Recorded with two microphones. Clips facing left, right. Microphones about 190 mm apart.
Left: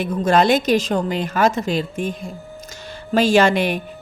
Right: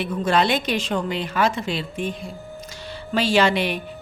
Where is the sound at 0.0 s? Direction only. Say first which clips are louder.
Left 4 dB; 45° left (ahead or behind).